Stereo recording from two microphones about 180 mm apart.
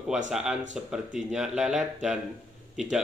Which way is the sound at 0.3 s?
Centre (ahead or behind).